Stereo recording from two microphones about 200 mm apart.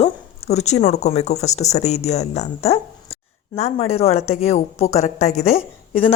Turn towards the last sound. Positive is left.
turn(degrees=30)  # may be behind; listen again after turning